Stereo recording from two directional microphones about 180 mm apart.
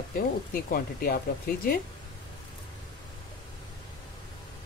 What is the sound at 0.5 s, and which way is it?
Speech, 55° left (ahead or behind).